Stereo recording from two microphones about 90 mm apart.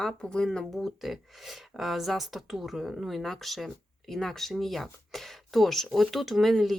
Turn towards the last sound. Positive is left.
turn(degrees=0)  # may be behind; listen again after turning